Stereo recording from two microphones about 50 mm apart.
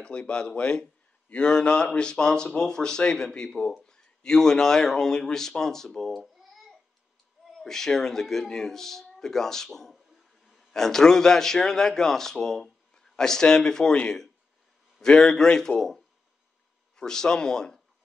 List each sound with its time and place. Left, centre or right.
0.0 s speech: left
6.2 s babbling: centre
7.4 s speech: centre
9.9 s a sound: centre
10.7 s speech: centre
15.0 s speech: centre